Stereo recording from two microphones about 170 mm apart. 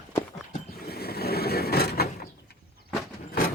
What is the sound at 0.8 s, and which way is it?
Vehicle, 65° left (ahead or behind).